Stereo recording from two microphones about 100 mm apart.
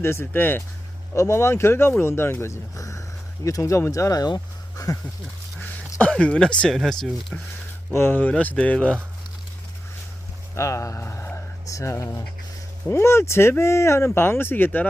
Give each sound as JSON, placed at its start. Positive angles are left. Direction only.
{"t": 0.0, "sound": "speech", "side_deg": 25}
{"t": 4.8, "sound": "a sound", "side_deg": 40}
{"t": 5.5, "sound": "a sound", "side_deg": 15}
{"t": 6.7, "sound": "speech", "side_deg": 0}
{"t": 7.9, "sound": "speech", "side_deg": 20}
{"t": 10.5, "sound": "speech", "side_deg": 30}